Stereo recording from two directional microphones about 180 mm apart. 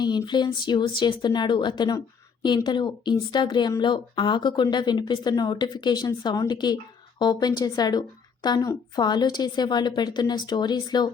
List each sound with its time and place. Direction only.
0.0 s speech: 25° left (ahead or behind)